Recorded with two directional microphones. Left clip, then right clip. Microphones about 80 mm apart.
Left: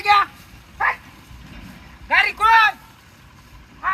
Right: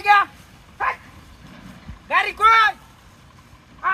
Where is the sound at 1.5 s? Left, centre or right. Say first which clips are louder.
Left 2 dB; right.